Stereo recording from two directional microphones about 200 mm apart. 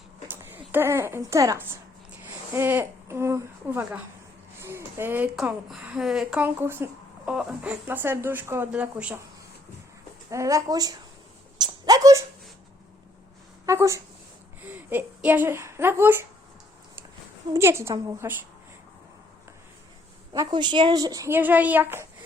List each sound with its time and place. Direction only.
0.3 s a woman's voice: 10° right (ahead or behind)
10.2 s a woman's voice: 15° right (ahead or behind)
11.5 s a sound: 20° right (ahead or behind)
13.7 s a woman's voice: 15° right (ahead or behind)
17.5 s a woman's voice: 15° right (ahead or behind)
20.3 s a woman's voice: 20° right (ahead or behind)